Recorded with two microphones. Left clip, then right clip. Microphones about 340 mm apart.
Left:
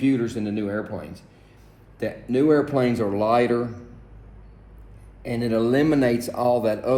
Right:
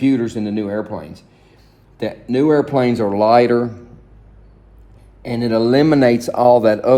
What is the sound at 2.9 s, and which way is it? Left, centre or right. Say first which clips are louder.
Speech: right 11 dB; right.